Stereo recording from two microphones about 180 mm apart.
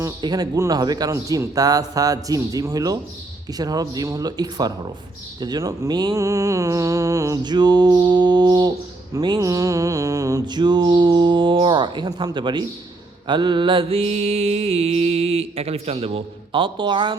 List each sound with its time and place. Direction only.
0.0 s mantra: 20° right (ahead or behind)